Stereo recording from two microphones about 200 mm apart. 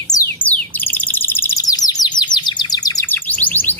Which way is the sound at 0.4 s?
5° left (ahead or behind).